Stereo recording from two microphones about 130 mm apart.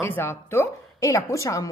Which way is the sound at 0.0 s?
20° left (ahead or behind).